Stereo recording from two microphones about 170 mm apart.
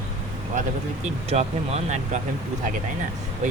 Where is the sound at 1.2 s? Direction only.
40° right (ahead or behind).